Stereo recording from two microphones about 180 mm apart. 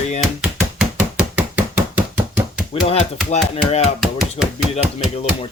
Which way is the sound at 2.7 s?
35° left (ahead or behind).